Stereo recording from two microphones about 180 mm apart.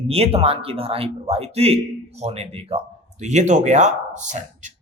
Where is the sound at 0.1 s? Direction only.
35° right (ahead or behind).